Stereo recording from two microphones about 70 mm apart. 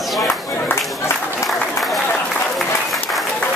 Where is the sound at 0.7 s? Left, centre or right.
Left.